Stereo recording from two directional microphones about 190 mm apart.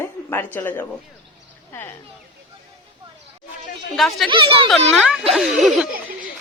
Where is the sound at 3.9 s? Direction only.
Centre (ahead or behind).